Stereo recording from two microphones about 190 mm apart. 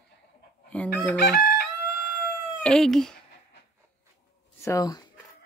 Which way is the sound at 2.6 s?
5° left (ahead or behind).